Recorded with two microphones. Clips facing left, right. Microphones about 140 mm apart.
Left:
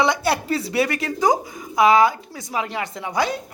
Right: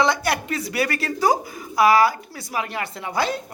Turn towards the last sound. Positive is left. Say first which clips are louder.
# left 1 dB
turn(degrees=15)  # may be behind; listen again after turning